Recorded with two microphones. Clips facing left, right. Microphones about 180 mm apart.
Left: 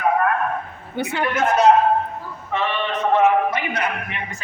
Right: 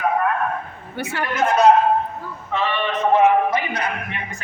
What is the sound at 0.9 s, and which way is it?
Speech, 20° left (ahead or behind).